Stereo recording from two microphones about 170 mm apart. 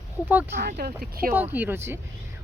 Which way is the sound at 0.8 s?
60° right (ahead or behind).